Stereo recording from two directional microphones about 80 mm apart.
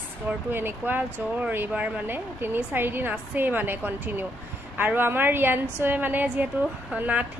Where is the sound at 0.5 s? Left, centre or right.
Right.